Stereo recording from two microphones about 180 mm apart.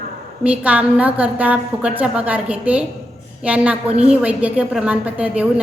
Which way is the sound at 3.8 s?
35° right (ahead or behind).